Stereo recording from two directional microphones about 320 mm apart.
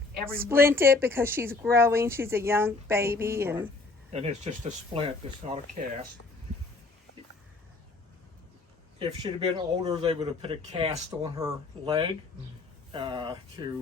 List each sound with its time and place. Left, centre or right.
0.3 s speech: centre
4.1 s speech: centre
9.0 s speech: centre